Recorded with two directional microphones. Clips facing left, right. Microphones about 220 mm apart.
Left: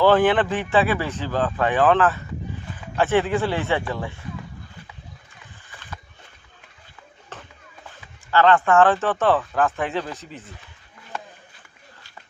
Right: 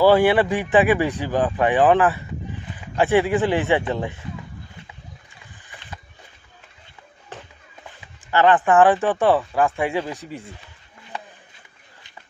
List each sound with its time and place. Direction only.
0.0 s speech: 10° right (ahead or behind)
8.3 s speech: 15° right (ahead or behind)